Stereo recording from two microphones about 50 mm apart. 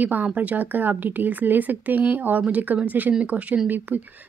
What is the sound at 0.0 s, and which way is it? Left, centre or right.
Speech, right.